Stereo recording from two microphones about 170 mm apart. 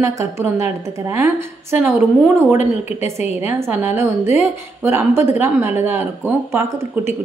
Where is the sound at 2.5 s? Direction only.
15° right (ahead or behind).